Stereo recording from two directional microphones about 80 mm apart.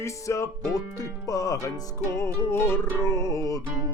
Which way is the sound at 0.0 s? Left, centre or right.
Left.